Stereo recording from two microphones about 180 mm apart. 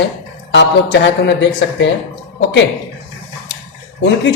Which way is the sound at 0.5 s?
75° left (ahead or behind).